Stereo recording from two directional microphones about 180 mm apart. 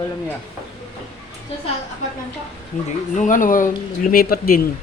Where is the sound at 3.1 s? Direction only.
45° left (ahead or behind).